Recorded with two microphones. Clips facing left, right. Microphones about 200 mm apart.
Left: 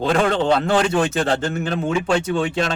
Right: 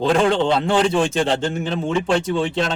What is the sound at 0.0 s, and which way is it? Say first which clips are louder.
A man's voice: right 1 dB; centre (ahead or behind).